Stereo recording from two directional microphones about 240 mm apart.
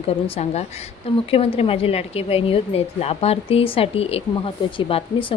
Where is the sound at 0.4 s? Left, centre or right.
Left.